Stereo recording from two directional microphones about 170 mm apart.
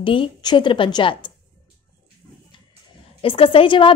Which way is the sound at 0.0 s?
30° left (ahead or behind).